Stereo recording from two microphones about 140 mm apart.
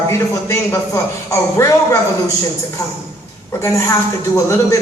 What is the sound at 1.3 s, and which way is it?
Speech, 20° left (ahead or behind).